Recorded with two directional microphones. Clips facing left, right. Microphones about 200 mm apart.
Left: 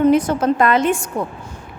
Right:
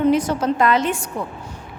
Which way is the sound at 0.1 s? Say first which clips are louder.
Left 3 dB; 55° left (ahead or behind).